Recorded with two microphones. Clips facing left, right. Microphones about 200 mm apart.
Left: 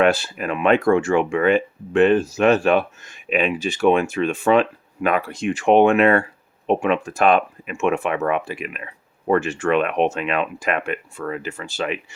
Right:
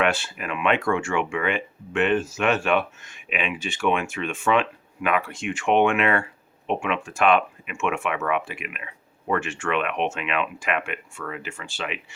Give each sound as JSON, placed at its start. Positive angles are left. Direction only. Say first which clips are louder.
{"t": 0.0, "sound": "speech", "louder": "left 6 dB", "side_deg": 40}